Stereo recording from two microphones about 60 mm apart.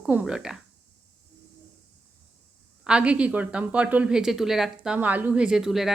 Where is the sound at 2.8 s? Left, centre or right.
Centre.